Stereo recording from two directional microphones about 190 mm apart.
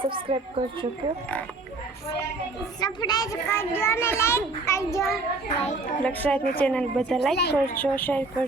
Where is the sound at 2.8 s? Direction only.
20° left (ahead or behind).